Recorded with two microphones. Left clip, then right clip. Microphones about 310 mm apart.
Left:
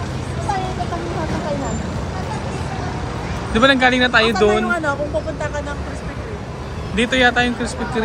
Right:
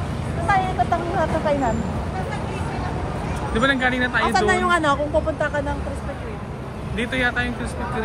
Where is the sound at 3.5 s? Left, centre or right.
Centre.